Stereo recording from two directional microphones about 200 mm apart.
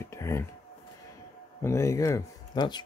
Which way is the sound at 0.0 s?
15° left (ahead or behind).